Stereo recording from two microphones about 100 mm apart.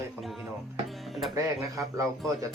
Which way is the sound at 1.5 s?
30° right (ahead or behind).